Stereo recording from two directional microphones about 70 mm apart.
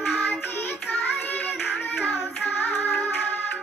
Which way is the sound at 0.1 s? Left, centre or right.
Left.